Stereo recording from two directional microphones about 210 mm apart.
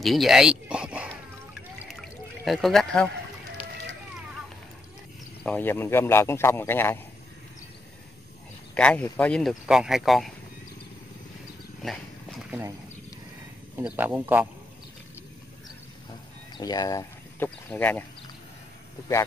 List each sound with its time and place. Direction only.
0.0 s speech: centre (ahead or behind)
1.9 s pour: centre (ahead or behind)
3.6 s fire: 25° left (ahead or behind)
5.4 s a man's voice: 10° left (ahead or behind)
8.7 s speech: 5° left (ahead or behind)
11.8 s speech: centre (ahead or behind)
12.4 s speech: 10° right (ahead or behind)
13.7 s speech: 10° right (ahead or behind)
16.5 s a sound: 20° left (ahead or behind)
17.6 s a man's voice: 10° left (ahead or behind)